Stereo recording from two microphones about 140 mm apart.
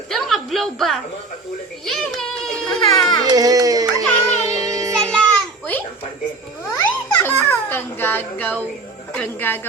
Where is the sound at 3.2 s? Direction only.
25° right (ahead or behind).